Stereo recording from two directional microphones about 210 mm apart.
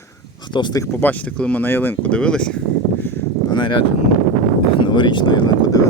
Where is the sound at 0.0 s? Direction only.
20° left (ahead or behind); by 2.6 s 5° left (ahead or behind).